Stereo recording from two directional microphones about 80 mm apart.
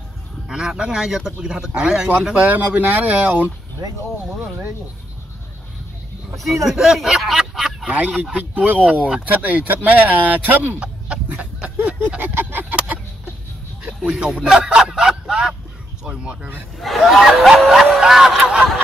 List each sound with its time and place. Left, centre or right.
0.5 s speech: centre
2.5 s speech: right
6.4 s speech: centre
7.9 s speech: right
12.4 s a sound: right
13.8 s speech: centre
16.8 s music: centre